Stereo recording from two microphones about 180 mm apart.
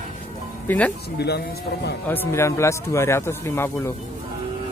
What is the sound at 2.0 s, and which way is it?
A man's voice, 10° left (ahead or behind).